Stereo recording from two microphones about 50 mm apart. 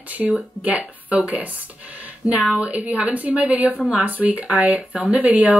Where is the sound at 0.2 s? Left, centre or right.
Right.